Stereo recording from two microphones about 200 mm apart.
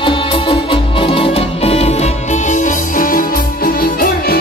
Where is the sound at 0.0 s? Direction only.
25° left (ahead or behind).